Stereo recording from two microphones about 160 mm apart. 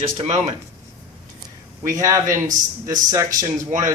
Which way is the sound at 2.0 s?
20° right (ahead or behind).